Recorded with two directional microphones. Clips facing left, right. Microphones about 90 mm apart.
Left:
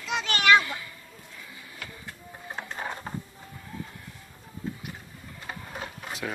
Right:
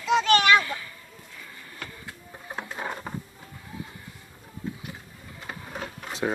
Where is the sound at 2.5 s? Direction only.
5° right (ahead or behind).